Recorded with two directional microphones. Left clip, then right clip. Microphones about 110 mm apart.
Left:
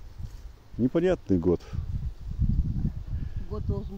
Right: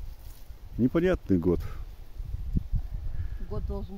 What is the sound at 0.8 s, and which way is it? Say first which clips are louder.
Speech: left 1 dB; 55° right (ahead or behind).